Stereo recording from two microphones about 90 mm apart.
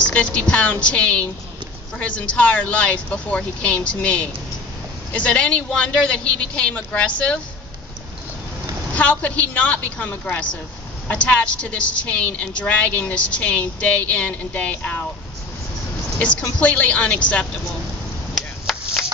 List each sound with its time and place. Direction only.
0.0 s a woman's voice: 15° left (ahead or behind)
8.9 s a woman's voice: 15° left (ahead or behind)
16.2 s a woman's voice: 15° left (ahead or behind)
18.7 s vehicle: 5° left (ahead or behind)